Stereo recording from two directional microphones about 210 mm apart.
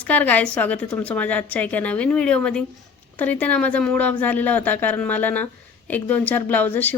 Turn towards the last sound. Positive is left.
turn(degrees=10)  # may be behind; listen again after turning